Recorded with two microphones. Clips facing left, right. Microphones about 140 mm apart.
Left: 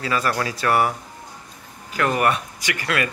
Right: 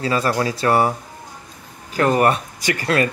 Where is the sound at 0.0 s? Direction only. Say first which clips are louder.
Right 4 dB; 30° right (ahead or behind).